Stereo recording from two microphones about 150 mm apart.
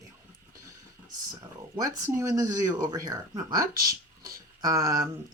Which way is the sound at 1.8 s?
20° right (ahead or behind).